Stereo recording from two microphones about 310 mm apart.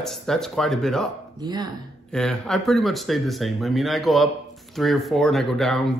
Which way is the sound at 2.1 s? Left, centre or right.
Centre.